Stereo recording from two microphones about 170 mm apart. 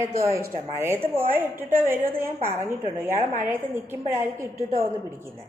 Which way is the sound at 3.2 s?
50° right (ahead or behind).